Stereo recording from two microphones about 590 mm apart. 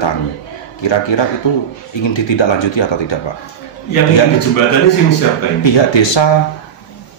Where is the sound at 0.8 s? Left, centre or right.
Left.